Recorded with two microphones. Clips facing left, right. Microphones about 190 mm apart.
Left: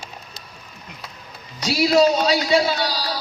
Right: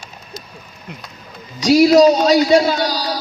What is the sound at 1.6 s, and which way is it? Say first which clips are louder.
Speech: right 7 dB; 45° right (ahead or behind).